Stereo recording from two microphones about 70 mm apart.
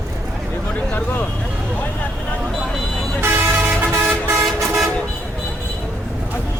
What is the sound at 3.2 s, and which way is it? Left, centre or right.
Vehicle, right.